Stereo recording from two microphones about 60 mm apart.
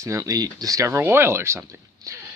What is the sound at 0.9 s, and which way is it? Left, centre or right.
Speech, right.